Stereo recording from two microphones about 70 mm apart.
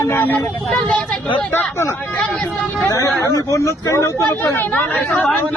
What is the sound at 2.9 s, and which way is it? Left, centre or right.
Speech, left.